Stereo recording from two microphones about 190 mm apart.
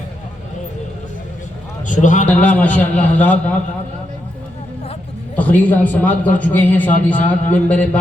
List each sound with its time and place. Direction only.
1.9 s a man's voice: 40° left (ahead or behind)
2.2 s a man's voice: 10° left (ahead or behind)
5.4 s a man's voice: 10° left (ahead or behind)